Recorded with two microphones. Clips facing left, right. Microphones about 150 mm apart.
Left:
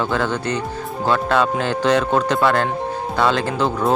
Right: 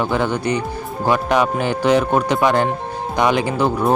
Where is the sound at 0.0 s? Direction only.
15° right (ahead or behind).